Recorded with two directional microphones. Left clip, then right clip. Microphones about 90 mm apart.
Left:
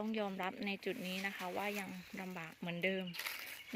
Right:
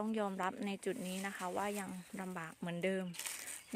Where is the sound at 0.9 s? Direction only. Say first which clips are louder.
Left 1 dB; 15° right (ahead or behind).